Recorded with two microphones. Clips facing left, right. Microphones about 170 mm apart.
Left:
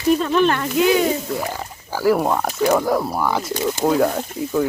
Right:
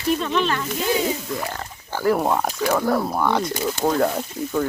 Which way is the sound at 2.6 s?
10° left (ahead or behind).